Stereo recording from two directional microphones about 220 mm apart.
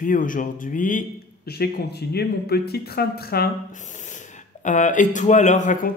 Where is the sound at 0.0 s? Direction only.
40° left (ahead or behind).